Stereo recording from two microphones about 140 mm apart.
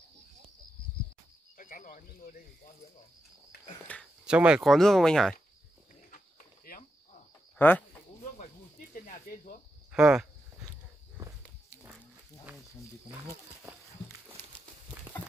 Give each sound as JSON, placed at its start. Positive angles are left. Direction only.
{"t": 1.6, "sound": "speech", "side_deg": 65}
{"t": 3.9, "sound": "speech", "side_deg": 10}
{"t": 4.3, "sound": "speech", "side_deg": -5}
{"t": 6.0, "sound": "a sound", "side_deg": 80}
{"t": 7.5, "sound": "speech", "side_deg": 15}
{"t": 8.9, "sound": "speech", "side_deg": 80}
{"t": 9.9, "sound": "speech", "side_deg": -5}
{"t": 14.4, "sound": "a sound", "side_deg": 15}